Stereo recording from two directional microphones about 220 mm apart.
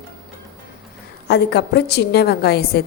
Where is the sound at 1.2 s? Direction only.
50° left (ahead or behind).